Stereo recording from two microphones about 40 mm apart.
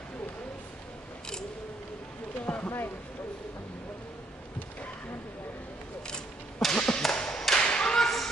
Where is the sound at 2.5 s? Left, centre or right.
Centre.